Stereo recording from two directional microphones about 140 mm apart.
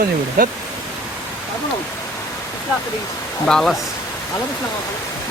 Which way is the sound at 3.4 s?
5° left (ahead or behind).